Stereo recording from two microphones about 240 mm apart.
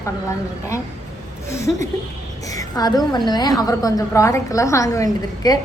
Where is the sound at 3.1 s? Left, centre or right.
Centre.